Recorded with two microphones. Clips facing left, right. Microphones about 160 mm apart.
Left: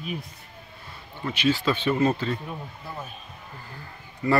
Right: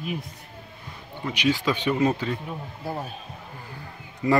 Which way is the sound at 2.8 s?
35° right (ahead or behind).